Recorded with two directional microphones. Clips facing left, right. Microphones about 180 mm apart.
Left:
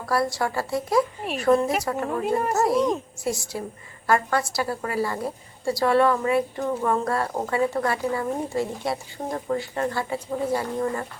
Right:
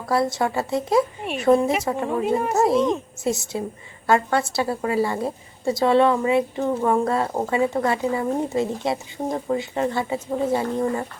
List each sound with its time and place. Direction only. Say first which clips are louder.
0.0 s a woman's voice: right 3 dB; 25° right (ahead or behind)
2.2 s speech: right 1 dB; centre (ahead or behind)
2.6 s a woman's voice: right 4 dB; 25° right (ahead or behind)